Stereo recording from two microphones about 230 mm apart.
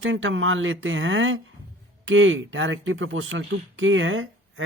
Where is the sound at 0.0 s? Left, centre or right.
Right.